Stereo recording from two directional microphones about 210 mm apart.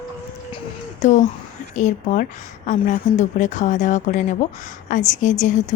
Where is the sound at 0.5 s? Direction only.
35° left (ahead or behind).